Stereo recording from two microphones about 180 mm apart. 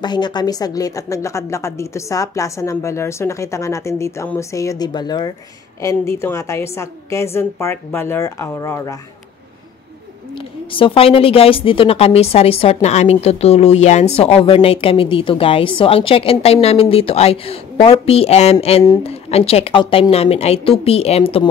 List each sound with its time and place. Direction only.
0.0 s a woman's voice: 25° left (ahead or behind)
10.7 s a woman's voice: 30° left (ahead or behind)